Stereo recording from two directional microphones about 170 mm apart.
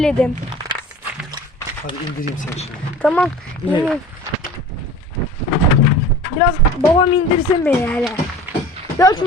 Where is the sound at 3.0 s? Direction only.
5° left (ahead or behind).